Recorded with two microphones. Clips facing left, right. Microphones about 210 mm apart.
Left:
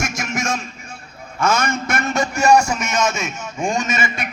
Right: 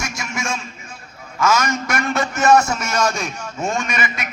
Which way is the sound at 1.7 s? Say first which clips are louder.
Even; 25° left (ahead or behind).